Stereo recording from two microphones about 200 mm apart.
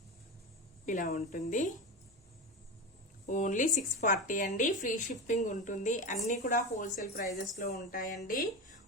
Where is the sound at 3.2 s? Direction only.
40° left (ahead or behind).